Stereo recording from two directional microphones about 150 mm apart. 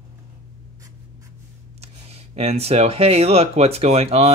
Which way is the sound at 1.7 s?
45° right (ahead or behind).